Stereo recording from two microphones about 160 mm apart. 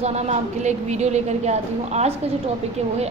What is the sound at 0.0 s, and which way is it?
A woman's voice, 45° right (ahead or behind).